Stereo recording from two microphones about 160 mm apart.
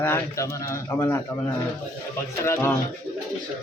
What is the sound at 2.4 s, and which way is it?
Speech, 15° left (ahead or behind).